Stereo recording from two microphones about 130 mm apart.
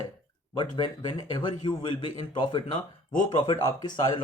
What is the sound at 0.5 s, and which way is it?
Speech, 35° left (ahead or behind).